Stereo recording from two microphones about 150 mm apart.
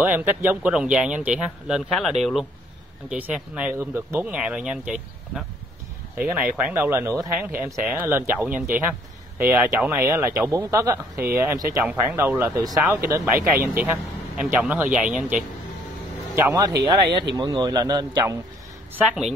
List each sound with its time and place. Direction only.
0.0 s speech: 10° right (ahead or behind)
7.3 s speech: 5° right (ahead or behind)
16.5 s speech: 25° right (ahead or behind)
18.9 s speech: 5° right (ahead or behind)